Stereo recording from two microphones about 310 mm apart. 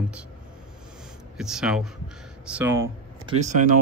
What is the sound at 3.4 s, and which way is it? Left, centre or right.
Speech, right.